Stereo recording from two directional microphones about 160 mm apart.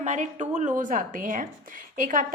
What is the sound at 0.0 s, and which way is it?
A woman's voice, 45° right (ahead or behind).